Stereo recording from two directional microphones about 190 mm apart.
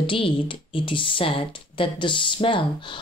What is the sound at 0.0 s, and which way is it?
Speech, 25° left (ahead or behind).